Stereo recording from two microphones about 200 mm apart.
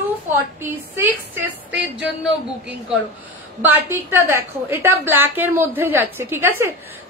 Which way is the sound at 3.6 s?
10° right (ahead or behind).